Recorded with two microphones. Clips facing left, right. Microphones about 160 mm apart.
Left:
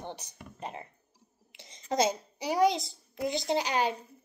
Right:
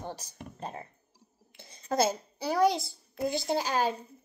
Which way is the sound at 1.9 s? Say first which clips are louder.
Even; 15° left (ahead or behind).